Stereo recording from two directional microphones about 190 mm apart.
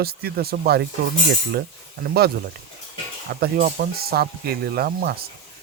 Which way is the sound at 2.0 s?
55° right (ahead or behind).